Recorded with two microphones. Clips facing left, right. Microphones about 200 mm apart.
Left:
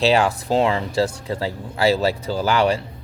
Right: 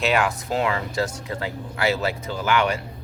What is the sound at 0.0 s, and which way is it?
Speech, 30° left (ahead or behind).